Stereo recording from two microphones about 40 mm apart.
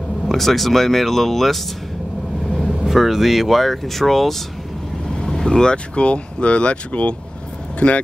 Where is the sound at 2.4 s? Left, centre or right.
Centre.